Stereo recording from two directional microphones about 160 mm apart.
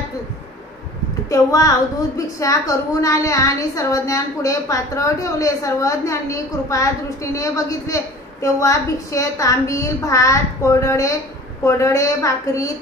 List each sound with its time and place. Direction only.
1.3 s a woman's voice: 20° left (ahead or behind)